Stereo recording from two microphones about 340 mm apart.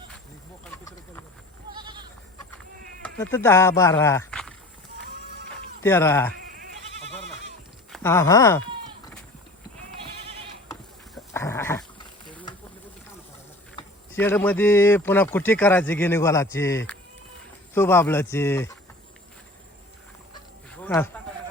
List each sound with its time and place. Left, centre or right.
0.6 s a sound: centre
1.7 s goat: centre
3.0 s speech: centre
5.8 s speech: centre
6.4 s goat: right
7.9 s speech: centre
10.7 s dog: centre
12.3 s a sound: centre
13.7 s speech: centre
20.7 s a sound: centre